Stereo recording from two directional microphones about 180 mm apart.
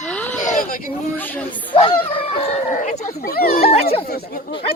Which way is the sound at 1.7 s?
30° left (ahead or behind).